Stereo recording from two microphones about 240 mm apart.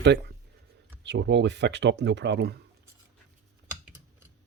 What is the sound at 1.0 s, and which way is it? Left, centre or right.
Speech, right.